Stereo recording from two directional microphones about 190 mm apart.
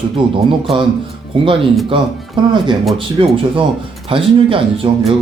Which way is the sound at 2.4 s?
25° right (ahead or behind).